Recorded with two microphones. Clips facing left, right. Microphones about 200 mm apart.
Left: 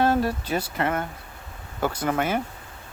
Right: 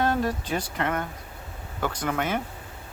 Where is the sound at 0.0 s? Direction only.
30° left (ahead or behind).